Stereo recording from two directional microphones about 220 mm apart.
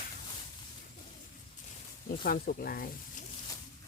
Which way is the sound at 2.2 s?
40° left (ahead or behind).